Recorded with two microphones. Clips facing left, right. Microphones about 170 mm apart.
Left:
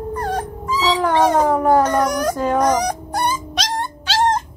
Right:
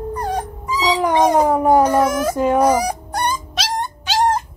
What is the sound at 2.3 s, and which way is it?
Fowl, 15° right (ahead or behind).